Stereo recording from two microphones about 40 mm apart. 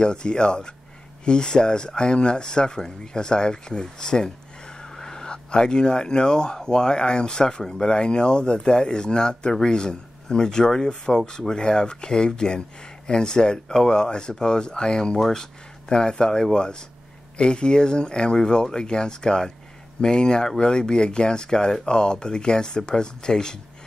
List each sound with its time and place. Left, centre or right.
0.0 s speech: left